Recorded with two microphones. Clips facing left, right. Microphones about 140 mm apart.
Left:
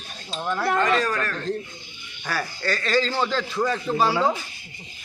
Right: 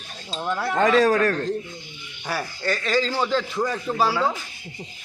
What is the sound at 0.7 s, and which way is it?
Speech, 90° right.